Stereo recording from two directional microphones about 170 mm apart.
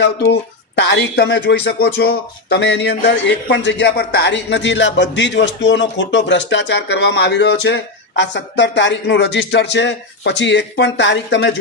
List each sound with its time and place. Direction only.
0.8 s speech: 85° left